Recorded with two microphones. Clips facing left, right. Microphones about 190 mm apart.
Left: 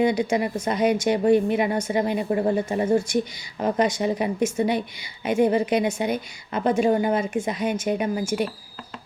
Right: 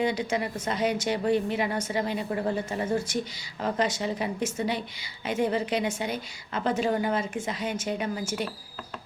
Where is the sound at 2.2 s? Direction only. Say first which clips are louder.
Left 6 dB; 25° left (ahead or behind).